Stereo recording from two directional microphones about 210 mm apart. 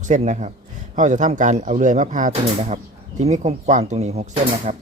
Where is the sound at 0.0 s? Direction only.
35° right (ahead or behind).